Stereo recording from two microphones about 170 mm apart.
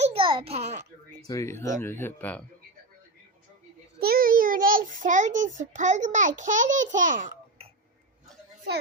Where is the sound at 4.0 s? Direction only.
60° right (ahead or behind).